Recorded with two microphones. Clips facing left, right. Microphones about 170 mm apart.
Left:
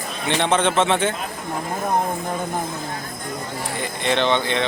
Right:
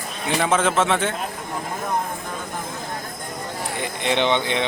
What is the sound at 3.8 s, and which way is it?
Speech, 15° right (ahead or behind).